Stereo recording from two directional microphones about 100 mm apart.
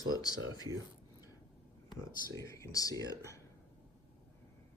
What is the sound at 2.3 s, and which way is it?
Speech, 35° left (ahead or behind).